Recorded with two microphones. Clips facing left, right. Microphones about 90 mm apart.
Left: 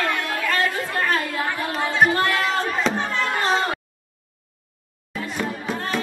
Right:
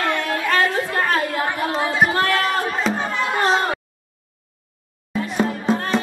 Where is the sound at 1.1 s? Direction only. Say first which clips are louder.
Right 3 dB; 20° right (ahead or behind).